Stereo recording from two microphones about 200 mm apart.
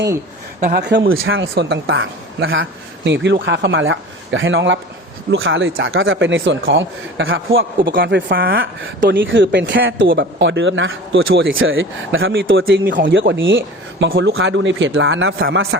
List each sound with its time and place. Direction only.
0.6 s speech: 55° right (ahead or behind); by 8.6 s 70° right (ahead or behind)
9.0 s a man's voice: 45° right (ahead or behind)
9.2 s speech: 70° right (ahead or behind)
12.6 s a man's voice: 50° right (ahead or behind)
13.1 s speech: 65° right (ahead or behind)
14.0 s speech: 60° right (ahead or behind); by 15.8 s 75° right (ahead or behind)